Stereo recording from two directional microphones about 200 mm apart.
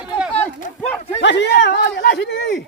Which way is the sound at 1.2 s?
60° left (ahead or behind).